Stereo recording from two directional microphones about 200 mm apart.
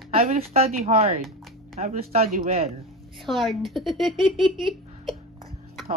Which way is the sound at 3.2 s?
Centre (ahead or behind).